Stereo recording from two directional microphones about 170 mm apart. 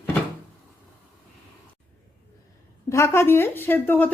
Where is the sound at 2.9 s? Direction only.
15° left (ahead or behind).